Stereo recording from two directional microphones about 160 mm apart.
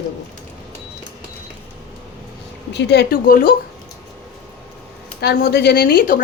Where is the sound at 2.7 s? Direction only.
90° left; by 3.5 s 65° left (ahead or behind).